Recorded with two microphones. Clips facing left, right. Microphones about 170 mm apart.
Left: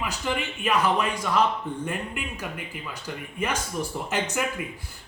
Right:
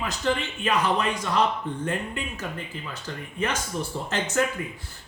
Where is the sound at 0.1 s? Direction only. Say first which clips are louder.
Right 3 dB; 10° left (ahead or behind).